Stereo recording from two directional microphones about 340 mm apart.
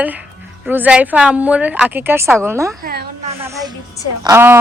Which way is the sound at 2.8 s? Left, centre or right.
Right.